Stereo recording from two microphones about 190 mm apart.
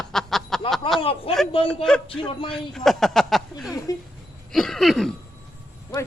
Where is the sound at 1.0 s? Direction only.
30° left (ahead or behind).